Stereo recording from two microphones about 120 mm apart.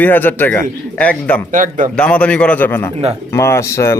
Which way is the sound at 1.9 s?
10° left (ahead or behind).